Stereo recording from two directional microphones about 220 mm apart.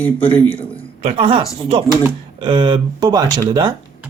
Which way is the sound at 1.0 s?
25° right (ahead or behind).